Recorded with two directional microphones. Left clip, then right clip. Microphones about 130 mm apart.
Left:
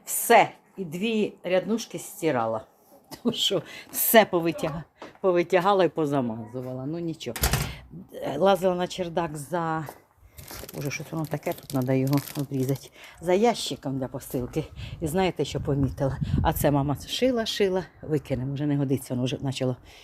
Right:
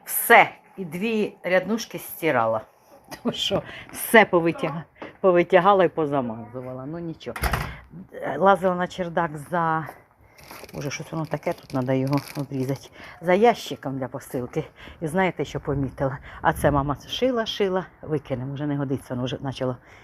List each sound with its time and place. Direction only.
0.3 s a woman's voice: 15° left (ahead or behind)
5.3 s speech: centre (ahead or behind)
5.6 s speech: 20° left (ahead or behind)
6.0 s speech: 45° left (ahead or behind)
6.5 s speech: 60° left (ahead or behind)
8.2 s a woman's voice: 25° left (ahead or behind)
12.1 s speech: 45° left (ahead or behind)
13.0 s speech: 10° left (ahead or behind); by 17.0 s 25° left (ahead or behind)
17.3 s speech: 40° left (ahead or behind)